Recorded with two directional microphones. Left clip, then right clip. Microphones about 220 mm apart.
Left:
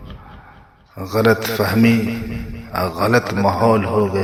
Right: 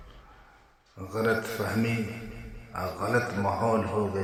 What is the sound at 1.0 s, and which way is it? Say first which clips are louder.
Speech: left 11 dB; 40° left (ahead or behind).